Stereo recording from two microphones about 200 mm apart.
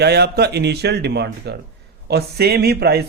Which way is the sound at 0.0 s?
55° right (ahead or behind).